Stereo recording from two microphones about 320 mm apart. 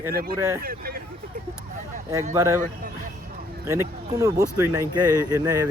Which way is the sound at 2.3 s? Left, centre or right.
Centre.